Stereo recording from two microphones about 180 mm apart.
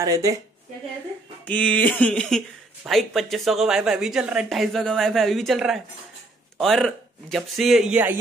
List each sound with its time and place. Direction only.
0.0 s a woman's voice: 20° right (ahead or behind)
1.4 s speech: 5° left (ahead or behind); by 8.2 s 10° right (ahead or behind)